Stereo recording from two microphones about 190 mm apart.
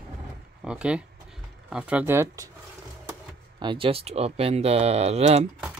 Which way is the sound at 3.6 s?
25° right (ahead or behind).